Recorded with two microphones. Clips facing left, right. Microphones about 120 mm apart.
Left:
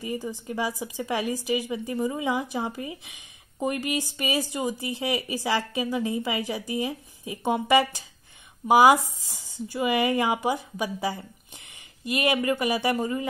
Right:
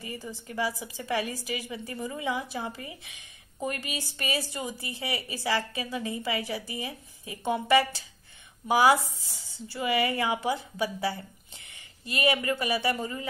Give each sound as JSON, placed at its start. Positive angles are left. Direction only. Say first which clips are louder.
{"t": 0.0, "sound": "a woman's voice", "louder": "left 7 dB", "side_deg": 15}